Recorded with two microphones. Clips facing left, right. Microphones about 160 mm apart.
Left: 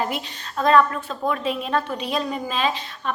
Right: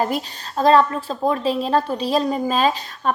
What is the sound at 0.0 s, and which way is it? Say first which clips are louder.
A woman's voice: right 4 dB; 35° right (ahead or behind).